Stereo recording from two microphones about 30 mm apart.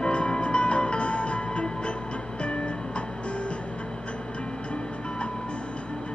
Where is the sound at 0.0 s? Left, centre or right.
Left.